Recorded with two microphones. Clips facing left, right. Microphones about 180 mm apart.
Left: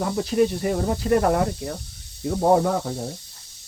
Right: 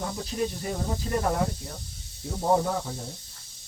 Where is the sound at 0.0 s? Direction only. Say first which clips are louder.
Left 9 dB; 70° left (ahead or behind).